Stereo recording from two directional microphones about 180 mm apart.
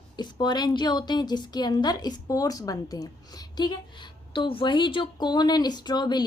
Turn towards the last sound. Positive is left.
turn(degrees=25)  # may be behind; listen again after turning